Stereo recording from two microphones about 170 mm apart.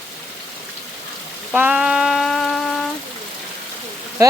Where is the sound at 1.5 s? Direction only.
5° right (ahead or behind).